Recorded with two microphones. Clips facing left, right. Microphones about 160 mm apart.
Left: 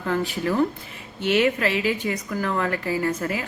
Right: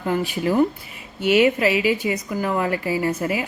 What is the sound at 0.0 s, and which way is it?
Speech, 15° right (ahead or behind).